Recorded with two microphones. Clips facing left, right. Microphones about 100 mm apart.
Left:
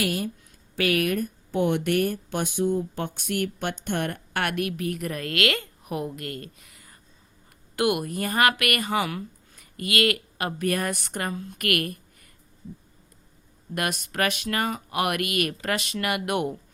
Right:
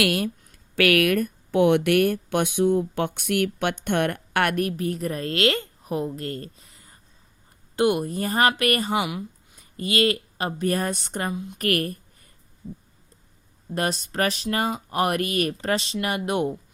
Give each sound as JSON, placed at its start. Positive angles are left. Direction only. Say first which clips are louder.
{"t": 0.0, "sound": "a woman's voice", "louder": "right 4 dB", "side_deg": -75}
{"t": 9.0, "sound": "a sound", "louder": "right 1 dB", "side_deg": -15}
{"t": 9.7, "sound": "a woman's voice", "louder": "right 2 dB", "side_deg": -30}
{"t": 11.3, "sound": "a woman's voice", "louder": "right 2 dB", "side_deg": -15}
{"t": 11.5, "sound": "speech", "louder": "right 3 dB", "side_deg": -35}
{"t": 13.7, "sound": "speech", "louder": "right 2 dB", "side_deg": -30}